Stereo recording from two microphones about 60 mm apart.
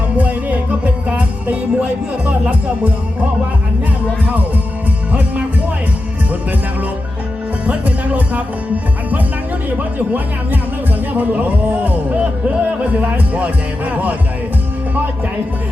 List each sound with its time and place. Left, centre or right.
0.2 s music: right
4.3 s speech: right
7.6 s speech: right
9.7 s speech: right